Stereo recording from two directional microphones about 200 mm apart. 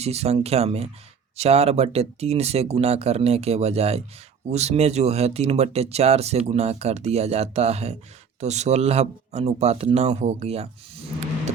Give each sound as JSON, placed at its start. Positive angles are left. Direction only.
{"t": 0.0, "sound": "speech", "side_deg": -30}